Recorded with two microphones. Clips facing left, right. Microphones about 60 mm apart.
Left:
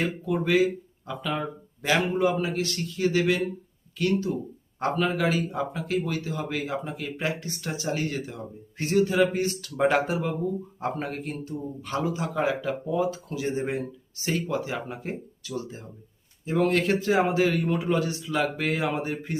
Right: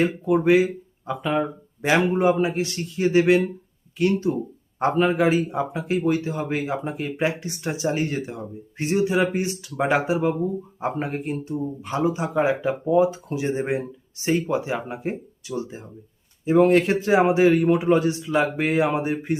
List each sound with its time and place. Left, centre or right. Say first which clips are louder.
0.0 s speech: right 7 dB; right